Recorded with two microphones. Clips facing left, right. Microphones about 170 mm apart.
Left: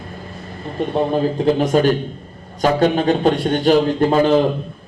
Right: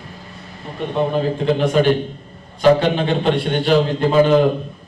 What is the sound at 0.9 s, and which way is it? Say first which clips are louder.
A man's voice: left 1 dB; 40° left (ahead or behind).